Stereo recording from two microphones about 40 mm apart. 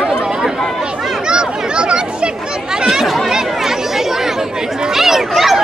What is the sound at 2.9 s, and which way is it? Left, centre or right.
Chatter, centre.